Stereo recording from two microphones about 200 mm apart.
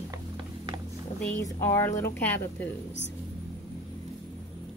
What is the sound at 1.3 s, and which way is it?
A woman's voice, 15° left (ahead or behind).